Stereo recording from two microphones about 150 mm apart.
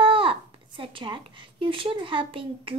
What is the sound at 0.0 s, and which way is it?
Speech, 35° right (ahead or behind).